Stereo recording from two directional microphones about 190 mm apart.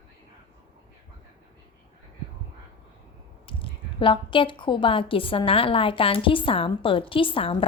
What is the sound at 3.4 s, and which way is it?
Speech, 30° left (ahead or behind).